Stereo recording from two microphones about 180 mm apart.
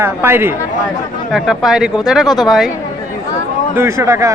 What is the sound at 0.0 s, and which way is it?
Speech, 15° right (ahead or behind).